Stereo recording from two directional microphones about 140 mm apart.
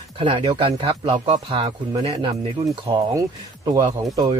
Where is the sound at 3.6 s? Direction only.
25° right (ahead or behind).